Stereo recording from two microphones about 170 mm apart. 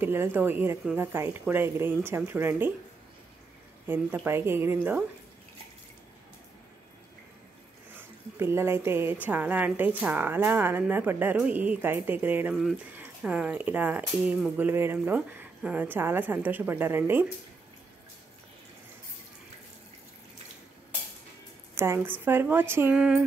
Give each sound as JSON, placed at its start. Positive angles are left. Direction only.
{"t": 0.0, "sound": "speech", "side_deg": -15}
{"t": 3.8, "sound": "speech", "side_deg": -10}
{"t": 7.9, "sound": "speech", "side_deg": -15}
{"t": 12.5, "sound": "speech", "side_deg": 0}
{"t": 21.7, "sound": "speech", "side_deg": -15}